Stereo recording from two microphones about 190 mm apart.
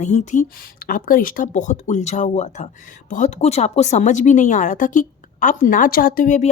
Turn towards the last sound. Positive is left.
turn(degrees=40)  # may be behind; listen again after turning